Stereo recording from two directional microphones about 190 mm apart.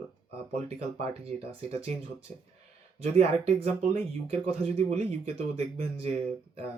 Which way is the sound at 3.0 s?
35° right (ahead or behind).